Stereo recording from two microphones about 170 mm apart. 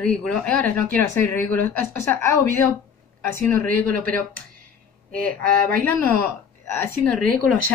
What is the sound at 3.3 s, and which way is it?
Speech, 15° left (ahead or behind).